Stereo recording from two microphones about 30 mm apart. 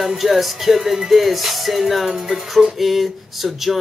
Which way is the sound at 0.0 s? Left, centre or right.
Centre.